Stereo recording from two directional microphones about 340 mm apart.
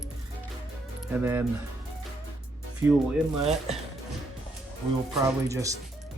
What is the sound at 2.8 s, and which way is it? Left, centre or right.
Speech, centre.